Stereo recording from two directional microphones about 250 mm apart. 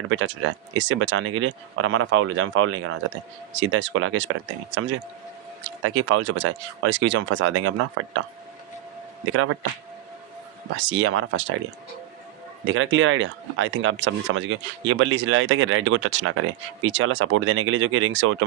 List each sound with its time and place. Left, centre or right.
0.1 s speech: right
9.3 s speech: right
10.8 s speech: right
12.6 s speech: right